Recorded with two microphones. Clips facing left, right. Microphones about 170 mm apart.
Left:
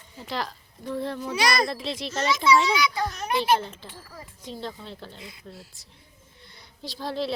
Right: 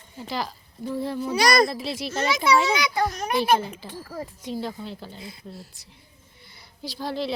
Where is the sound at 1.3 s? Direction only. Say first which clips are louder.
Right 5 dB; 40° right (ahead or behind).